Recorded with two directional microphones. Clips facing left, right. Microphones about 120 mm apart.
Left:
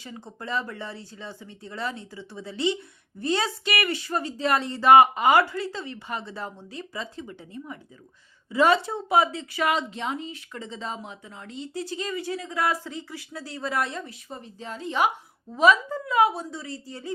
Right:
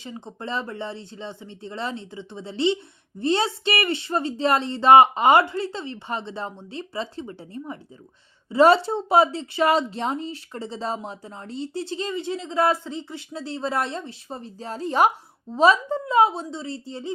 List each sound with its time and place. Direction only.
0.0 s a woman's voice: 20° right (ahead or behind)